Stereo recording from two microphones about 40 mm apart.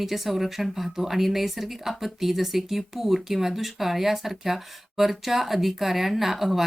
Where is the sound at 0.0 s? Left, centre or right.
Centre.